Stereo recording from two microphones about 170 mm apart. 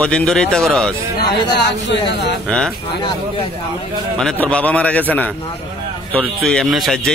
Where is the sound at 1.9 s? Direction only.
80° left.